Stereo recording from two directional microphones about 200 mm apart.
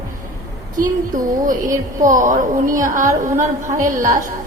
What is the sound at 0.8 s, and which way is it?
A woman's voice, 40° right (ahead or behind).